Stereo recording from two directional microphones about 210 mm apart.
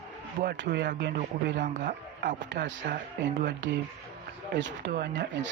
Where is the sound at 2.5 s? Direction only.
60° right (ahead or behind).